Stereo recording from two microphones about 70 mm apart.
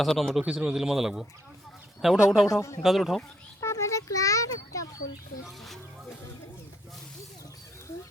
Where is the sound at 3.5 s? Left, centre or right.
Left.